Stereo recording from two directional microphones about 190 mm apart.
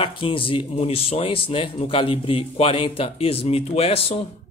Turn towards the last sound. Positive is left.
turn(degrees=30)  # may be behind; listen again after turning